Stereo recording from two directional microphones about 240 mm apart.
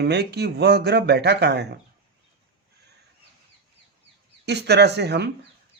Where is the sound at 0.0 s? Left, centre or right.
Right.